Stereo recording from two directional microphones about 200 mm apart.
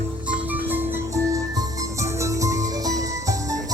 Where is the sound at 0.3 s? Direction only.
10° right (ahead or behind).